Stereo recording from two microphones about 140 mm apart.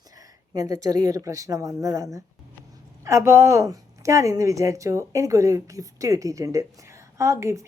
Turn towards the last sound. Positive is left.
turn(degrees=-20)  # may be behind; listen again after turning